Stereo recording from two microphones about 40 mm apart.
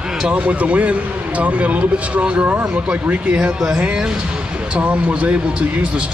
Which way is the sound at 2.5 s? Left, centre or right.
Right.